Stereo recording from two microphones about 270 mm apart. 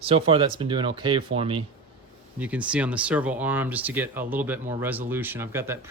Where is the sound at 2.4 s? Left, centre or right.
Centre.